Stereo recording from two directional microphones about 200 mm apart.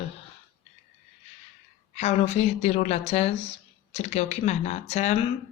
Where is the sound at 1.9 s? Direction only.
35° left (ahead or behind).